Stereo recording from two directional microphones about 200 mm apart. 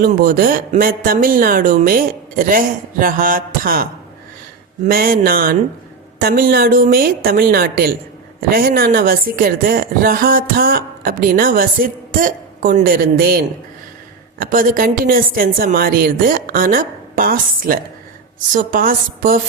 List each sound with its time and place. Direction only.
0.0 s speech: 45° right (ahead or behind)
4.9 s speech: 45° right (ahead or behind)